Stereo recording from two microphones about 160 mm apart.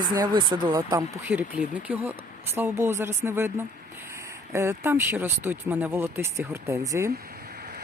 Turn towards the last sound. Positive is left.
turn(degrees=-20)  # may be behind; listen again after turning